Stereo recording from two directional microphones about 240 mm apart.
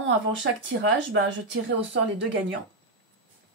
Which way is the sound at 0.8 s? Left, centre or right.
Right.